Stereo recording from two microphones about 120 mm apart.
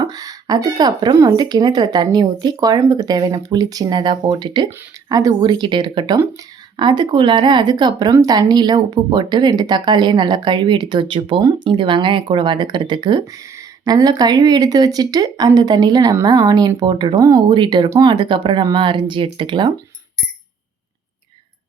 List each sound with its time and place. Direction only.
0.0 s speech: 30° right (ahead or behind)
17.2 s speech: 25° right (ahead or behind)
17.5 s speech: 40° right (ahead or behind)
17.8 s speech: 25° right (ahead or behind)
18.1 s speech: 40° right (ahead or behind)